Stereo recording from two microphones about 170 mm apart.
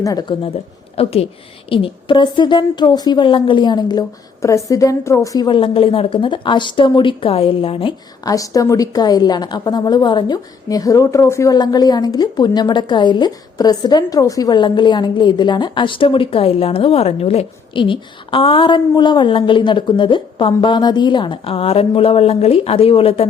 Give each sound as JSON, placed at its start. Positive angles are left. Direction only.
{"t": 0.0, "sound": "a woman's voice", "side_deg": 20}